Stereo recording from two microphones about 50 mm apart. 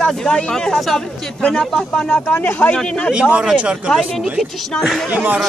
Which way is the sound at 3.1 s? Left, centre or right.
Right.